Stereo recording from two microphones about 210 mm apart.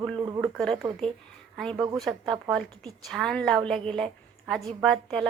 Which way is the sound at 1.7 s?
15° right (ahead or behind).